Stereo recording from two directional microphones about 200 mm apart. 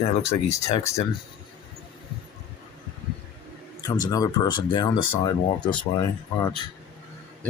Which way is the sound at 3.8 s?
20° left (ahead or behind).